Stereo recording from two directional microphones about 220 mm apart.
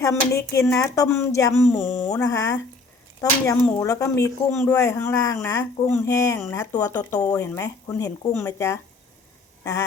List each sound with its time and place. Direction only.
0.0 s speech: 15° left (ahead or behind)